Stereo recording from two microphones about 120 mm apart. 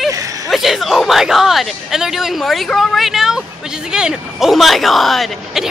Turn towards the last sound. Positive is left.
turn(degrees=0)  # may be behind; listen again after turning